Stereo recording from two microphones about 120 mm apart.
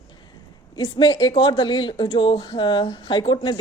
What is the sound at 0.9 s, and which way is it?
Speech, 40° left (ahead or behind).